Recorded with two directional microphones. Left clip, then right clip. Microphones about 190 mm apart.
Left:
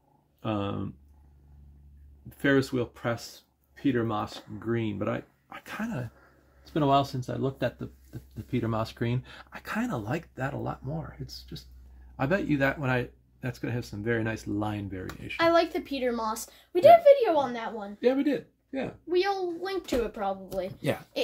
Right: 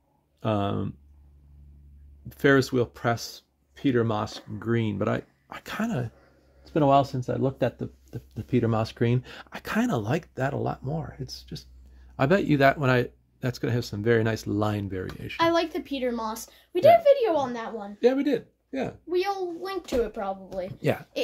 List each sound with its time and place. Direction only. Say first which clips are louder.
0.4 s speech: right 5 dB; 55° right (ahead or behind)
2.3 s speech: right 4 dB; 55° right (ahead or behind)
6.7 s speech: right 4 dB; 25° right (ahead or behind); by 15.0 s 55° right (ahead or behind)
15.3 s a woman's voice: even; 5° left (ahead or behind)
18.0 s speech: right 3 dB; 60° right (ahead or behind)
19.0 s a child's voice: left 1 dB; 10° right (ahead or behind)
20.8 s a woman's voice: right 7 dB; 30° right (ahead or behind)